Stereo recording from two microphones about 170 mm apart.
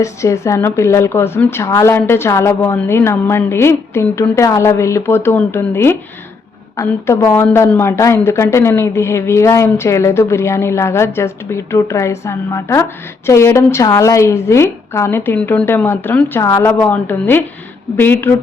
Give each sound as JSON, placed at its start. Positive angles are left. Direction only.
{"t": 0.0, "sound": "a woman's voice", "side_deg": 15}